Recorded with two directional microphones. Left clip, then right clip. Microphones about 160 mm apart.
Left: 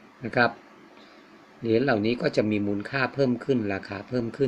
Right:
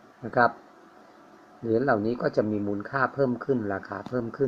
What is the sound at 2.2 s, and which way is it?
Speech, 30° left (ahead or behind).